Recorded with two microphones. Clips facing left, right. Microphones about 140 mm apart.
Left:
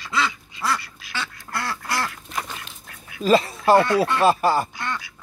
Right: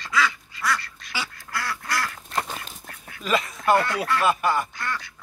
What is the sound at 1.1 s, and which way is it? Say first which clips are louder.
Duck: left 1 dB; 10° right (ahead or behind).